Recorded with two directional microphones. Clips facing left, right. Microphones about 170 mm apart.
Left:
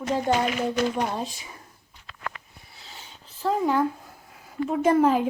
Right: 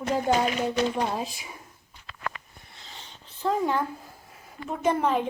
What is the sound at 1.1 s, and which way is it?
Speech, 5° right (ahead or behind).